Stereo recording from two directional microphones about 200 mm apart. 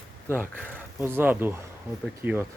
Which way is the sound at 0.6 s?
10° left (ahead or behind).